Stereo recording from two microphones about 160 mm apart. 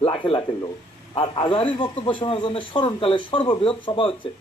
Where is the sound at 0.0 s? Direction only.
35° left (ahead or behind).